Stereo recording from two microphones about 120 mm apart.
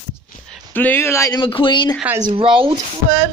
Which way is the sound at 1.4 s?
45° left (ahead or behind).